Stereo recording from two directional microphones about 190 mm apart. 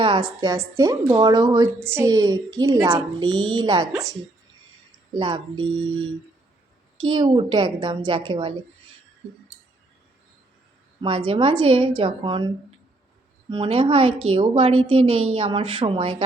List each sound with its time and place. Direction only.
0.0 s a woman's voice: 25° right (ahead or behind)
7.0 s a woman's voice: 25° right (ahead or behind)
11.0 s a woman's voice: 25° right (ahead or behind)
13.5 s a woman's voice: 30° right (ahead or behind)